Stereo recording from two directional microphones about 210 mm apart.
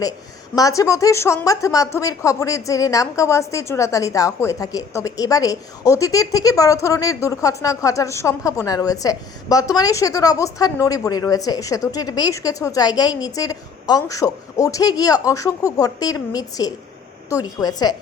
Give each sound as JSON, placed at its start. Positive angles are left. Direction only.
{"t": 0.5, "sound": "a woman's voice", "side_deg": 15}